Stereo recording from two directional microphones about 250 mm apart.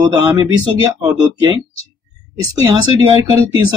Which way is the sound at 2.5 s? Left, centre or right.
Centre.